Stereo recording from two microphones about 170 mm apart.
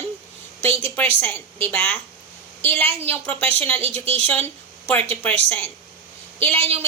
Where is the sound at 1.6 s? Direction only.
10° left (ahead or behind).